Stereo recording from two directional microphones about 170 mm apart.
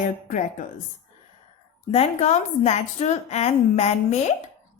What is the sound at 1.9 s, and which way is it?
A woman's voice, 40° left (ahead or behind).